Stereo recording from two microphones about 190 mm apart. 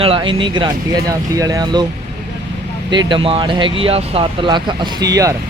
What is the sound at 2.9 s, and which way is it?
Speech, 25° right (ahead or behind).